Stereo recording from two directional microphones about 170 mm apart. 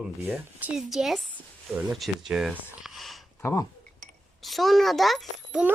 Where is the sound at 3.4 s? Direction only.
15° left (ahead or behind).